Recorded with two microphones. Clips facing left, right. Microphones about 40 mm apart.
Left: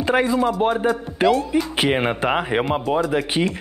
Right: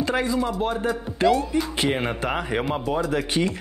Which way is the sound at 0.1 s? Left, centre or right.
Left.